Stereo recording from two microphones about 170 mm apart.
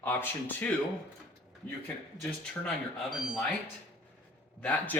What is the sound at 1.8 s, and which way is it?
Speech, 5° left (ahead or behind).